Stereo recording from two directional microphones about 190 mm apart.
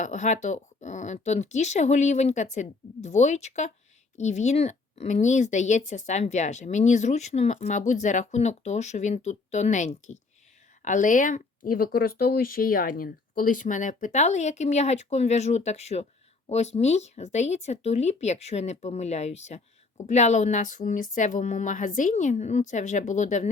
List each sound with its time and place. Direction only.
0.0 s speech: 40° left (ahead or behind)